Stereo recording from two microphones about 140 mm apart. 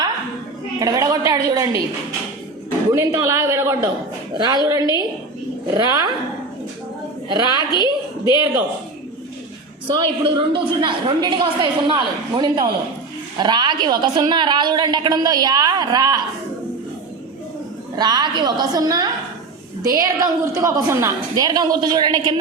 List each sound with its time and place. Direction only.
0.8 s a woman's voice: 25° right (ahead or behind)
2.9 s a woman's voice: 20° right (ahead or behind)
4.4 s a woman's voice: 30° right (ahead or behind)
7.3 s a woman's voice: 30° right (ahead or behind)
7.7 s a woman's voice: 30° left (ahead or behind)
9.9 s a woman's voice: 35° right (ahead or behind)
17.9 s a woman's voice: 30° right (ahead or behind)